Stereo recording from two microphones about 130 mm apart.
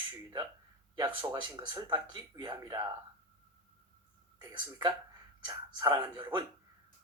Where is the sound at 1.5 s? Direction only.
35° right (ahead or behind).